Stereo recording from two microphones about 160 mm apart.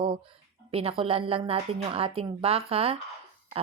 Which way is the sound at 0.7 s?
40° right (ahead or behind).